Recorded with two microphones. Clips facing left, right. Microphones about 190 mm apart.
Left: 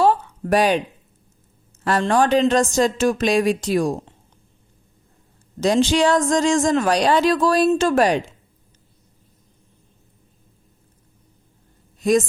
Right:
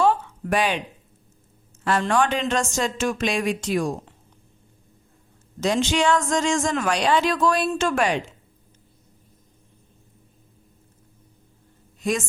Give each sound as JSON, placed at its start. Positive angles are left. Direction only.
{"t": 0.0, "sound": "a sound", "side_deg": 40}
{"t": 1.8, "sound": "speech", "side_deg": 35}
{"t": 5.5, "sound": "speech", "side_deg": 35}